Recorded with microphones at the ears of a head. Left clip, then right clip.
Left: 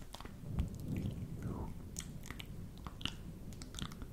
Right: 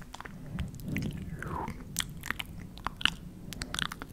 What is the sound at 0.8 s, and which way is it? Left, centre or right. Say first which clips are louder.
Biting: right 11 dB; right.